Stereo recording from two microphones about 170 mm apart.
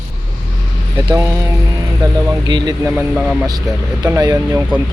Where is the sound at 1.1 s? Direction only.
15° right (ahead or behind).